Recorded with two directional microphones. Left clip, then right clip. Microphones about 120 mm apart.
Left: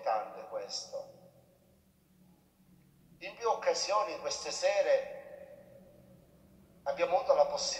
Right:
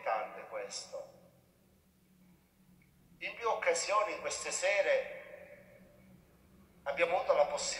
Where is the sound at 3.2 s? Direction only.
25° right (ahead or behind).